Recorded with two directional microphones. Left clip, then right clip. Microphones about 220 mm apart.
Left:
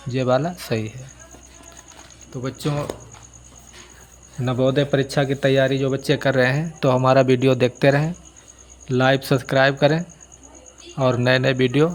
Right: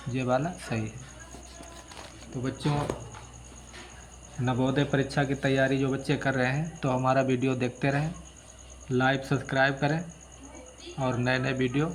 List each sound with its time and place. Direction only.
0.1 s speech: 45° left (ahead or behind)
2.4 s speech: 55° left (ahead or behind)
4.4 s speech: 45° left (ahead or behind)